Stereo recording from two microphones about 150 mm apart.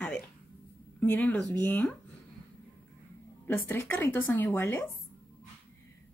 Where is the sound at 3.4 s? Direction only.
15° left (ahead or behind).